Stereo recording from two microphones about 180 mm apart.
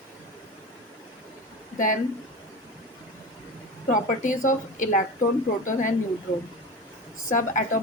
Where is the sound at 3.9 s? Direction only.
45° left (ahead or behind).